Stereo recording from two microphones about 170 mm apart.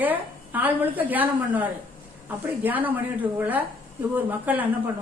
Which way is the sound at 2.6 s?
10° right (ahead or behind).